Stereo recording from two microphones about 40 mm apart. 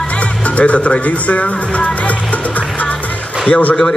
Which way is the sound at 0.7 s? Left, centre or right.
Left.